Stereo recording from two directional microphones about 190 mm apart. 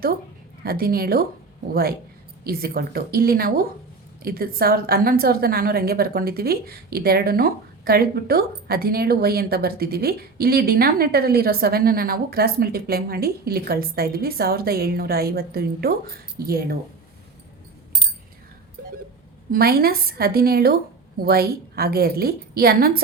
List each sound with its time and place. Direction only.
0.6 s a woman's voice: 55° right (ahead or behind)
19.5 s a woman's voice: 55° right (ahead or behind)